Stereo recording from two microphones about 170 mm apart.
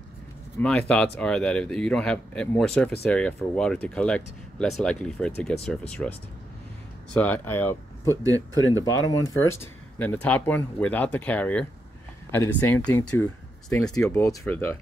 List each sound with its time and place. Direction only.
0.6 s speech: 5° left (ahead or behind)
7.2 s speech: 10° left (ahead or behind)
8.2 s speech: 20° right (ahead or behind)
8.8 s speech: 20° left (ahead or behind)